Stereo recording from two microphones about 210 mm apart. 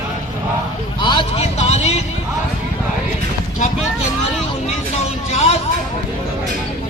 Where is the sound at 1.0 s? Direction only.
20° left (ahead or behind).